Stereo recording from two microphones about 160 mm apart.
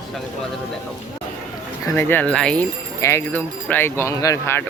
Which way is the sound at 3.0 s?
15° left (ahead or behind).